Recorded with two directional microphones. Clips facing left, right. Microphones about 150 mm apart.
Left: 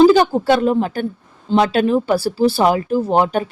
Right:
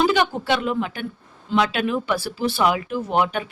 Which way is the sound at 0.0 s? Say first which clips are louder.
Left 9 dB; 35° left (ahead or behind).